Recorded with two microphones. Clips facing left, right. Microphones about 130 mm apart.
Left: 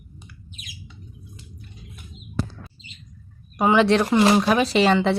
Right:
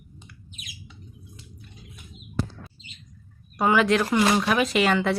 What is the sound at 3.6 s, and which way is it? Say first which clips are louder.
Speech: left 3 dB; 25° left (ahead or behind).